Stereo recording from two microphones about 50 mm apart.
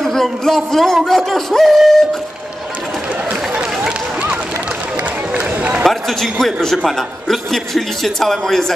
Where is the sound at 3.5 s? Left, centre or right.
Right.